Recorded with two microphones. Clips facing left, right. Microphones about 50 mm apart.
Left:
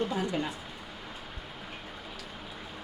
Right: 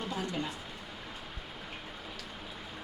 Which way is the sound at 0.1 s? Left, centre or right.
Centre.